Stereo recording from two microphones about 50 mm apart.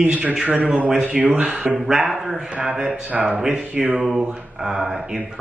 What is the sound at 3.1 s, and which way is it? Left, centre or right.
Speech, right.